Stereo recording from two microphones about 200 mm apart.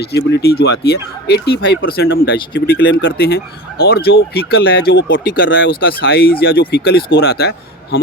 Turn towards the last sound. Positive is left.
turn(degrees=50)  # may be behind; listen again after turning